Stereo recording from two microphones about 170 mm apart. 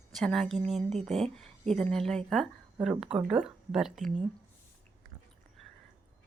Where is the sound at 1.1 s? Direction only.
Centre (ahead or behind).